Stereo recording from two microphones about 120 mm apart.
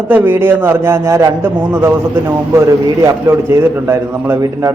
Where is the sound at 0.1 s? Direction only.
15° right (ahead or behind).